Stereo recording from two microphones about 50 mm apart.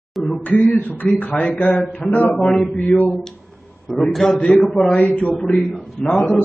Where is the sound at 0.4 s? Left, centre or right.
Left.